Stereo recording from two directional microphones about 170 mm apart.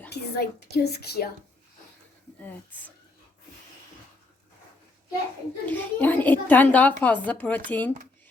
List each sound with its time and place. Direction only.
0.1 s a woman's voice: 70° left (ahead or behind)
5.6 s a woman's voice: 10° left (ahead or behind)